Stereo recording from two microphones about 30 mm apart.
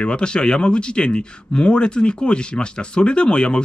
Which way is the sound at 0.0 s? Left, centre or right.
Left.